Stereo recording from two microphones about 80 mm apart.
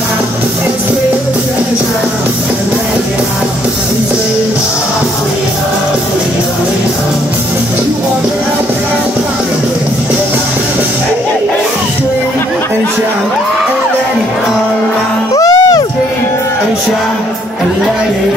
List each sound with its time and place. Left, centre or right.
15.3 s music: left